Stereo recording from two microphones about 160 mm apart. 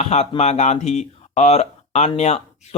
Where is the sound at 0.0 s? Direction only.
45° left (ahead or behind).